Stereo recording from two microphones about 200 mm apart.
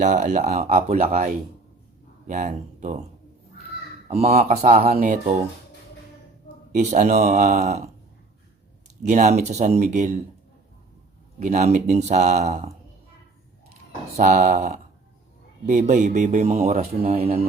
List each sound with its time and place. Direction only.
0.0 s a man's voice: 40° right (ahead or behind)
4.1 s a man's voice: 30° right (ahead or behind)
6.7 s a man's voice: 35° right (ahead or behind)
9.0 s a man's voice: 35° right (ahead or behind)
11.3 s a man's voice: 35° right (ahead or behind)
14.2 s a man's voice: 40° right (ahead or behind)